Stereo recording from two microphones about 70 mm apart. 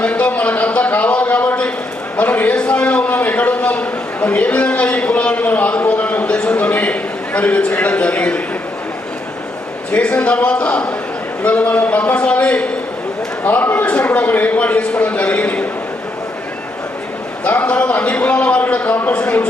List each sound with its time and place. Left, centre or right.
0.0 s a sound: centre
2.1 s a man's voice: left
9.9 s a man's voice: centre
17.4 s a man's voice: centre